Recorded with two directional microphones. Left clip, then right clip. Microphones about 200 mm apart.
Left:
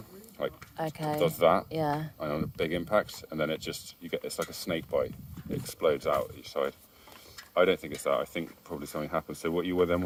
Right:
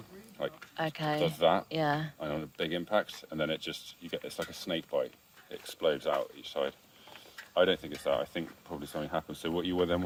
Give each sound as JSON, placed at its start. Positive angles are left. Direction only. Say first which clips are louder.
{"t": 0.4, "sound": "speech", "louder": "left 3 dB", "side_deg": 35}
{"t": 0.8, "sound": "speech", "louder": "even", "side_deg": 10}
{"t": 1.4, "sound": "speech", "louder": "left 3 dB", "side_deg": 35}
{"t": 1.7, "sound": "speech", "louder": "even", "side_deg": 10}
{"t": 2.1, "sound": "speech", "louder": "left 3 dB", "side_deg": 30}